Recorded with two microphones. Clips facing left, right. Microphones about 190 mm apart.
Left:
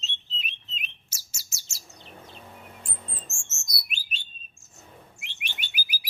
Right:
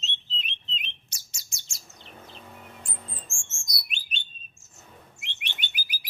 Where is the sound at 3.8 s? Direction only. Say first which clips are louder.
Even; 5° left (ahead or behind).